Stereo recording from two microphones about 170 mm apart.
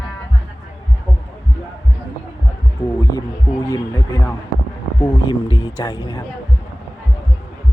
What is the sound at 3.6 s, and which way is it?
Speech, 20° left (ahead or behind).